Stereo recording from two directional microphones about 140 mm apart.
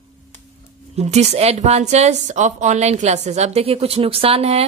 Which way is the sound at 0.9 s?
50° right (ahead or behind).